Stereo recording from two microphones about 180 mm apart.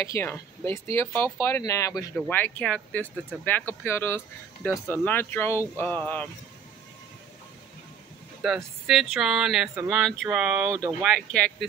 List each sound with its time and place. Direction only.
0.0 s speech: 15° left (ahead or behind)
8.4 s speech: centre (ahead or behind)
10.7 s speech: 20° right (ahead or behind)
11.0 s speech: centre (ahead or behind)